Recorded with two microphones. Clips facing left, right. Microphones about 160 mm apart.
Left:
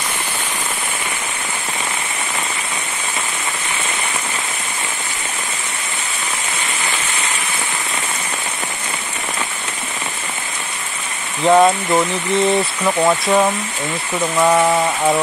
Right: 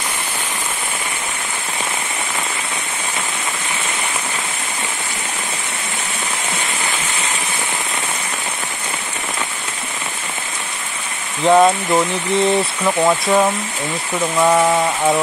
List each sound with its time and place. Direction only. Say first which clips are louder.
11.4 s speech: even; centre (ahead or behind)